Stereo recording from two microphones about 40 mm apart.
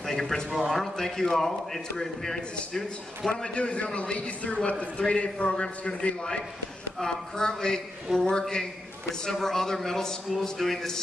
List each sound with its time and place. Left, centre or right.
0.0 s a man's voice: centre
0.9 s a man's voice: centre
3.3 s a man's voice: left; by 11.0 s centre